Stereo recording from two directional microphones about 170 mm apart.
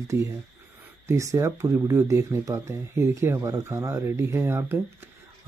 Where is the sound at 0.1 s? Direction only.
15° right (ahead or behind).